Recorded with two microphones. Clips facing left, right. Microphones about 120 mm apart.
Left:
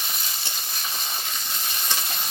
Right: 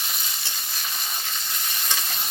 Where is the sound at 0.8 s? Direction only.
15° left (ahead or behind).